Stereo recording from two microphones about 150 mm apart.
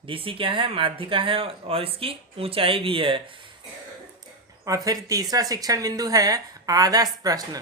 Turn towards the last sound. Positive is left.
turn(degrees=-25)  # may be behind; listen again after turning